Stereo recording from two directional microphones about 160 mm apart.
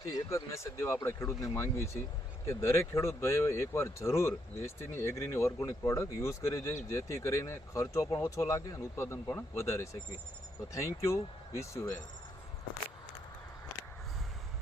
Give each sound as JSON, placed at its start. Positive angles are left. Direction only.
{"t": 0.1, "sound": "speech", "side_deg": 20}